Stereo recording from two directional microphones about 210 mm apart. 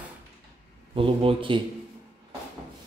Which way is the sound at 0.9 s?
25° right (ahead or behind).